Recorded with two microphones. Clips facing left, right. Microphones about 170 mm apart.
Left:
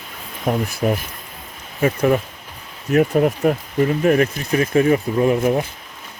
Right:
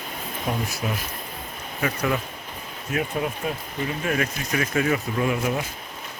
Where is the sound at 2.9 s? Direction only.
55° left (ahead or behind).